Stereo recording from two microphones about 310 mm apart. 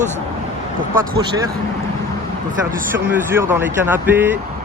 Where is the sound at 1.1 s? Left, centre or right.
Centre.